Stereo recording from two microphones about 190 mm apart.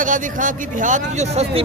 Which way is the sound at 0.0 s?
45° right (ahead or behind).